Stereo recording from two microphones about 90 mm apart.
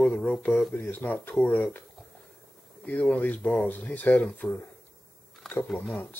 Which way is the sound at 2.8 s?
15° left (ahead or behind).